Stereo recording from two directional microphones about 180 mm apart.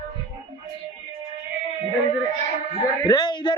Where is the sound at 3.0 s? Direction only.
25° left (ahead or behind).